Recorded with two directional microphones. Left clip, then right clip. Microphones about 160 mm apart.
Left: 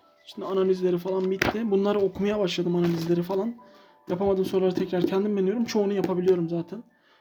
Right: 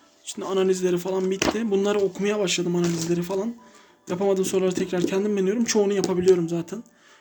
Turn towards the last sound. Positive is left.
turn(degrees=0)  # may be behind; listen again after turning